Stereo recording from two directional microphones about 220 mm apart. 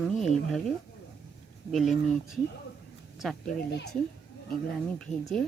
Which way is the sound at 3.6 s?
50° left (ahead or behind).